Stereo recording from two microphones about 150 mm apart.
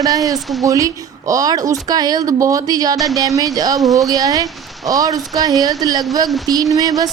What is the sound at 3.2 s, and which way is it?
Speech, 25° right (ahead or behind).